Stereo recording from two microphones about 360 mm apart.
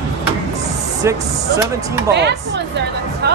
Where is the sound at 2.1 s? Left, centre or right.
Right.